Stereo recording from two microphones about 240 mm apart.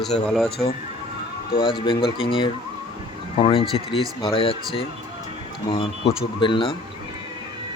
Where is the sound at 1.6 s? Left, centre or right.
Left.